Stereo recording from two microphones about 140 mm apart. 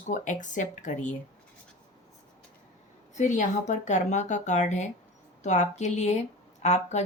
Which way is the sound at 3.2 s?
60° left (ahead or behind).